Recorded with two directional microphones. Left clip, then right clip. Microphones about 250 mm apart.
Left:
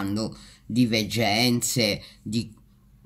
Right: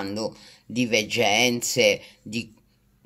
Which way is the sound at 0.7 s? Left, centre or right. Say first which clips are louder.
Right 2 dB; left.